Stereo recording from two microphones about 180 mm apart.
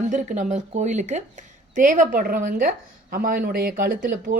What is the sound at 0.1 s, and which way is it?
A woman's voice, 45° right (ahead or behind).